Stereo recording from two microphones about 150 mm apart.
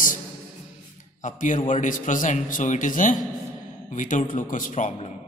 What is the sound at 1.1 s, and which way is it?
A man's voice, 55° left (ahead or behind).